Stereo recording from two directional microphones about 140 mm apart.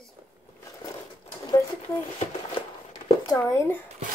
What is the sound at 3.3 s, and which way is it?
Speech, 20° left (ahead or behind).